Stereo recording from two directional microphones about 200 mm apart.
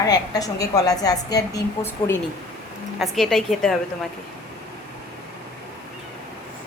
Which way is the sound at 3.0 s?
Centre (ahead or behind).